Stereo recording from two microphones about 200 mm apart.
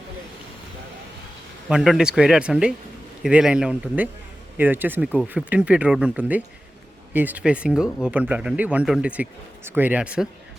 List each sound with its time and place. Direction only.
1.6 s speech: centre (ahead or behind)